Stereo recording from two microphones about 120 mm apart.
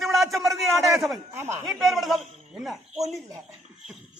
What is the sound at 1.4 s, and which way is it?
Speech, 20° right (ahead or behind).